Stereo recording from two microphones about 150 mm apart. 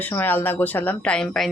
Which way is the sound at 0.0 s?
10° left (ahead or behind).